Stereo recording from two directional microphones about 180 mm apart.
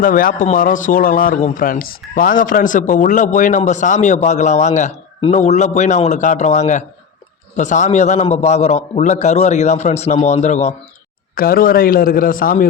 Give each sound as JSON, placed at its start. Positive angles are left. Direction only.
{"t": 0.0, "sound": "a man's voice", "side_deg": 50}
{"t": 11.3, "sound": "speech", "side_deg": 55}